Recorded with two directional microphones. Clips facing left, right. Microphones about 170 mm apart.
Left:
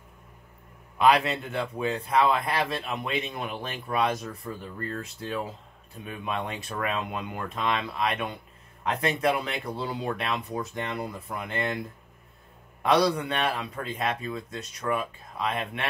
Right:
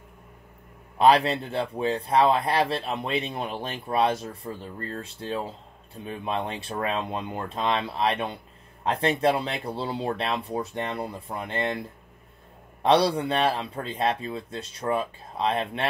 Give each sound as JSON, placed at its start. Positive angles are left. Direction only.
{"t": 0.9, "sound": "a man's voice", "side_deg": -30}
{"t": 12.8, "sound": "a man's voice", "side_deg": -30}